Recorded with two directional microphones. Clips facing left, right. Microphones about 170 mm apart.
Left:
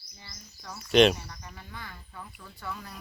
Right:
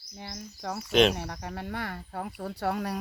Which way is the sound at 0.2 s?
65° right (ahead or behind).